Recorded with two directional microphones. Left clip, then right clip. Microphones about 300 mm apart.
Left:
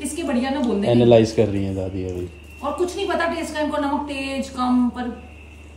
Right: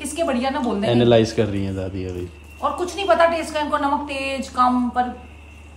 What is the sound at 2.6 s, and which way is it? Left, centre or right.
Speech, centre.